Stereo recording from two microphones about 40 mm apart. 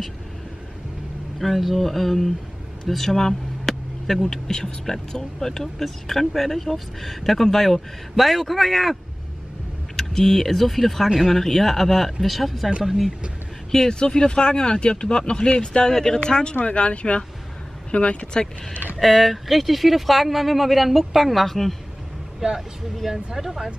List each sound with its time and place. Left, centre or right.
1.4 s speech: centre
4.5 s speech: centre
9.9 s speech: centre
13.7 s speech: centre
15.9 s speech: centre
16.2 s speech: left
18.9 s speech: centre
22.4 s speech: centre
23.0 s speech: centre